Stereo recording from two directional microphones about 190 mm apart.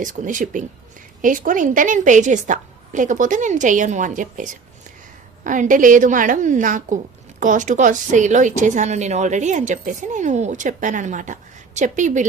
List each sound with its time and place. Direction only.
0.0 s a woman's voice: 45° right (ahead or behind)